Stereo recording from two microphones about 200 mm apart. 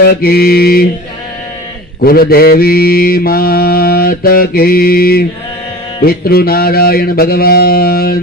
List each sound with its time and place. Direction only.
0.0 s mantra: 50° left (ahead or behind)
2.0 s mantra: 50° left (ahead or behind)